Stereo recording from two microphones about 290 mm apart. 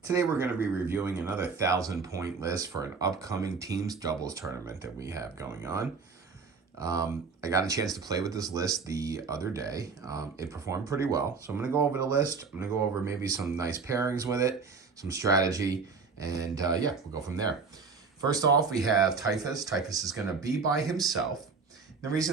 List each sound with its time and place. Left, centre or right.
0.0 s speech: centre
21.0 s speech: centre
22.0 s speech: centre